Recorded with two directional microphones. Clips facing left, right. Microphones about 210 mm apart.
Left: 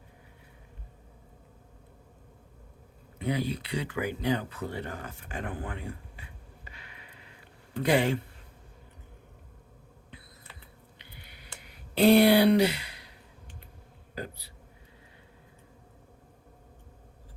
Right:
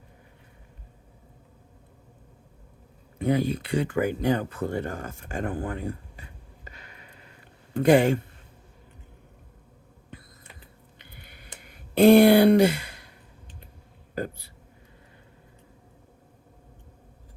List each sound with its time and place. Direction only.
3.2 s speech: 50° right (ahead or behind)
10.9 s a sound: 50° right (ahead or behind)
14.2 s speech: 50° right (ahead or behind)